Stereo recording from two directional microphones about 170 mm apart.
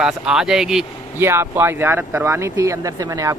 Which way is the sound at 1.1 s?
15° right (ahead or behind).